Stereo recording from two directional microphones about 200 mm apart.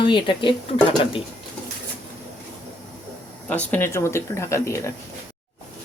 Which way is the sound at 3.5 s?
10° left (ahead or behind).